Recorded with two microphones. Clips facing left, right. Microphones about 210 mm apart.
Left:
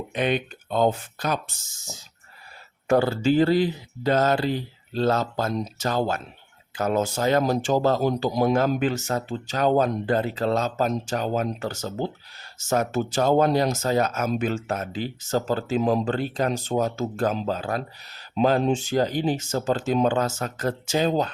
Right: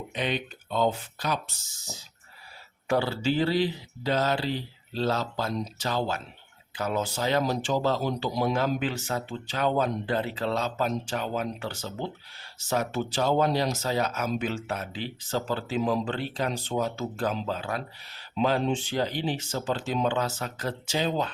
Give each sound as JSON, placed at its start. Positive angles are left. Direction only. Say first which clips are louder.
{"t": 0.1, "sound": "speech", "louder": "left 6 dB", "side_deg": 55}